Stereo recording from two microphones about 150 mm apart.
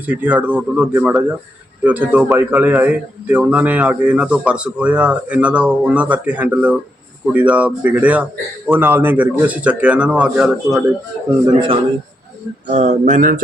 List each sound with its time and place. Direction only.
0.0 s a man's voice: 10° right (ahead or behind)
12.6 s speech: 55° right (ahead or behind)